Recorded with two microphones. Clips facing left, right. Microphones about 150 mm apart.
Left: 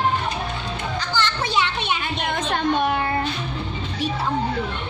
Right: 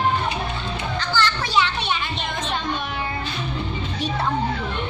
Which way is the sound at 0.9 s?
20° left (ahead or behind).